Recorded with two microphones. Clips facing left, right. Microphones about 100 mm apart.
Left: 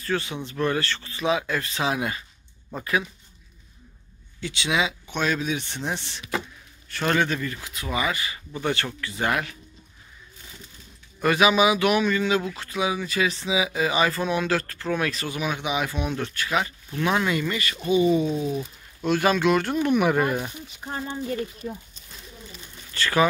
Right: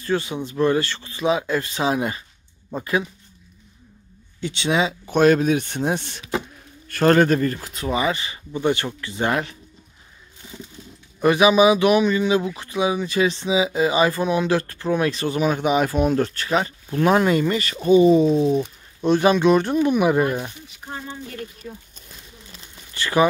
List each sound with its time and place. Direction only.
0.0 s speech: 20° right (ahead or behind)
4.4 s speech: 25° right (ahead or behind)
11.1 s speech: 20° right (ahead or behind)
20.2 s speech: centre (ahead or behind)
22.9 s a sound: 20° right (ahead or behind)